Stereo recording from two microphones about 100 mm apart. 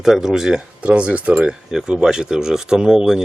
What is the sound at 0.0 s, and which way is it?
Speech, 5° right (ahead or behind).